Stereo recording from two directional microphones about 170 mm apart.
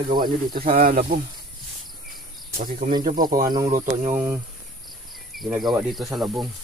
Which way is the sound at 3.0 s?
55° right (ahead or behind).